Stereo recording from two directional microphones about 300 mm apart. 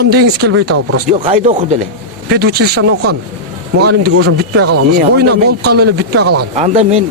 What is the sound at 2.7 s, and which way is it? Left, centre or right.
Speech, right.